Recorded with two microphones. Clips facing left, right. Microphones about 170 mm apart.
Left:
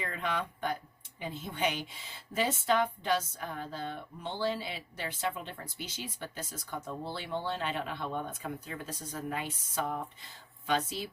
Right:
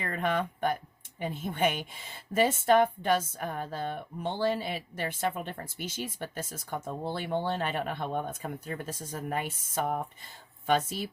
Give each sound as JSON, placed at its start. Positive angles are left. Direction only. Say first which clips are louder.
{"t": 0.0, "sound": "a woman's voice", "louder": "right 5 dB", "side_deg": -50}